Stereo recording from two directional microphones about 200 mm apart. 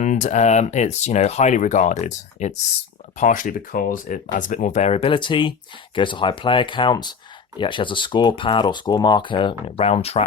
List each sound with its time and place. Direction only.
0.0 s speech: 40° left (ahead or behind)